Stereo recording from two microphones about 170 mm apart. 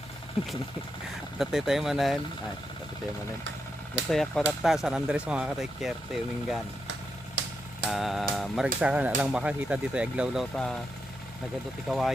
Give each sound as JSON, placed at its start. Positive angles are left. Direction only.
{"t": 1.4, "sound": "speech", "side_deg": 0}
{"t": 4.1, "sound": "speech", "side_deg": 0}
{"t": 7.4, "sound": "vehicle", "side_deg": -90}
{"t": 7.9, "sound": "speech", "side_deg": 0}
{"t": 11.9, "sound": "speech", "side_deg": 0}